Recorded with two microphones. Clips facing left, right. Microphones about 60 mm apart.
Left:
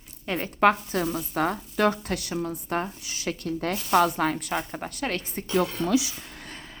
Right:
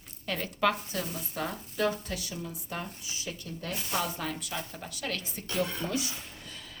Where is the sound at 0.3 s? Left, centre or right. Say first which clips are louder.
Left 7 dB; left.